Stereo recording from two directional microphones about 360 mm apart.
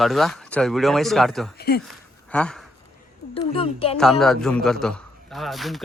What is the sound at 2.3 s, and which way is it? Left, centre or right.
Speech, centre.